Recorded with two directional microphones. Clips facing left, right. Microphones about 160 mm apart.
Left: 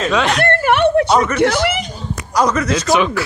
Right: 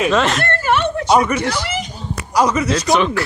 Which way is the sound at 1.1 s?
10° right (ahead or behind).